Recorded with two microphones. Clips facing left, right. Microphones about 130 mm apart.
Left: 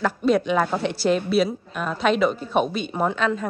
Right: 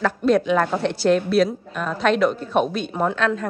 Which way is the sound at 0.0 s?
Centre (ahead or behind).